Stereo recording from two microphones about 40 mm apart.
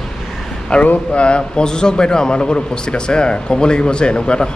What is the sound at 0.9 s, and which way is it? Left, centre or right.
A man's voice, left.